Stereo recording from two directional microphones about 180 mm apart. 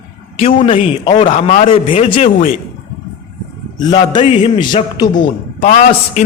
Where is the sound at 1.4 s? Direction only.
45° left (ahead or behind).